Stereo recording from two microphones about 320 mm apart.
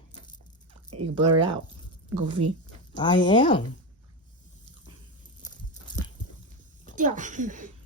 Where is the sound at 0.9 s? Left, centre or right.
Right.